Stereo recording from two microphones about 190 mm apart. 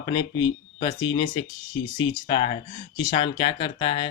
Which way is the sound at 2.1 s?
35° left (ahead or behind).